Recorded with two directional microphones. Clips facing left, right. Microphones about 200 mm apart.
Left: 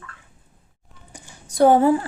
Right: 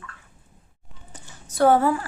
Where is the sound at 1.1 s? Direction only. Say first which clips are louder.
Left 2 dB; 15° left (ahead or behind).